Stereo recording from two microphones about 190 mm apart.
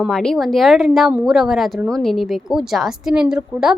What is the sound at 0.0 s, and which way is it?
A woman's voice, 5° left (ahead or behind).